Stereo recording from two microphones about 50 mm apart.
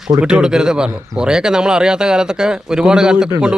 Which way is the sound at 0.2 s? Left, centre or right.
Centre.